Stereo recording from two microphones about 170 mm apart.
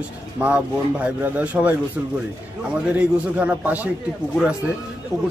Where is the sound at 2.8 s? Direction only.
10° right (ahead or behind).